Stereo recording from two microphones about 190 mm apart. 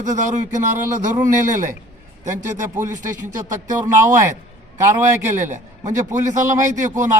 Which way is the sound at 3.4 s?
20° right (ahead or behind).